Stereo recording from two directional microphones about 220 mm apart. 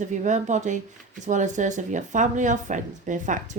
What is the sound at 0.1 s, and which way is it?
Speech, 35° right (ahead or behind).